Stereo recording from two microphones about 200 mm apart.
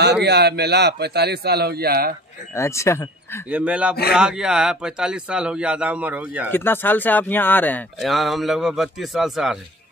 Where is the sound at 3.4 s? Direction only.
5° right (ahead or behind).